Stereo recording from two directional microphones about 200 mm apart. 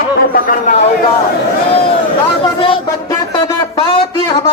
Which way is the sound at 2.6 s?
20° left (ahead or behind).